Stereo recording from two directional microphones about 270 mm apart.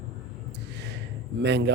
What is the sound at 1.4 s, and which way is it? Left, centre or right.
Speech, right.